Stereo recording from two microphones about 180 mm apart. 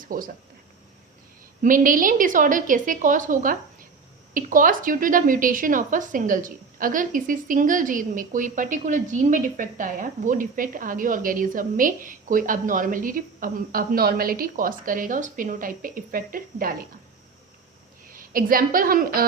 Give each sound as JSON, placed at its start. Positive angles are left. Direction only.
{"t": 0.0, "sound": "speech", "side_deg": -50}
{"t": 1.6, "sound": "speech", "side_deg": -50}
{"t": 18.1, "sound": "a woman's voice", "side_deg": -50}